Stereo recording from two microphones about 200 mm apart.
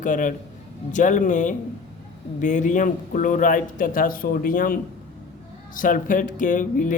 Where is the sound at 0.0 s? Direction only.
40° left (ahead or behind).